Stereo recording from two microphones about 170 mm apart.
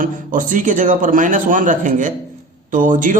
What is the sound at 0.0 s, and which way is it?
Speech, 50° right (ahead or behind).